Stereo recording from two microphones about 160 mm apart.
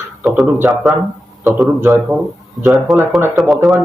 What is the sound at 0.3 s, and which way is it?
Speech, 5° right (ahead or behind).